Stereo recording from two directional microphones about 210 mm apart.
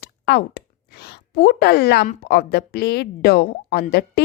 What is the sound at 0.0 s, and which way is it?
Speech, 50° left (ahead or behind).